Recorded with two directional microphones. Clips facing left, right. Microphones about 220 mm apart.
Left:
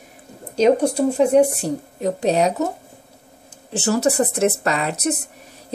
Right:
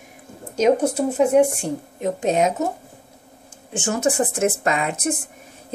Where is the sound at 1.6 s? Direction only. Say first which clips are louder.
Left 2 dB; 35° left (ahead or behind).